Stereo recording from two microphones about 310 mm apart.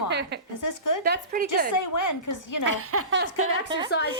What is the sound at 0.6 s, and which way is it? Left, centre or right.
Speech, left.